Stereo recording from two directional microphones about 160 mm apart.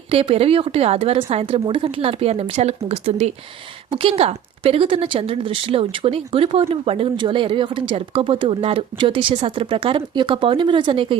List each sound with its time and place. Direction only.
0.1 s speech: 35° right (ahead or behind)